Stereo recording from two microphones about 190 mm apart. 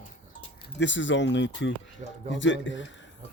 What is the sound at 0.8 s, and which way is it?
Speech, 75° left (ahead or behind).